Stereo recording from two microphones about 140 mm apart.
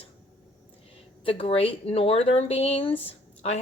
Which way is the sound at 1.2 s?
40° left (ahead or behind).